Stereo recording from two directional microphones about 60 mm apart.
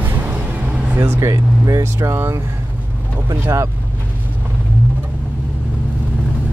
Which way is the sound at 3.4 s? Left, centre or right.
Right.